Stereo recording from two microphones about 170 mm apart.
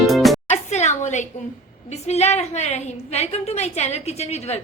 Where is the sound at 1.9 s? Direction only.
40° left (ahead or behind).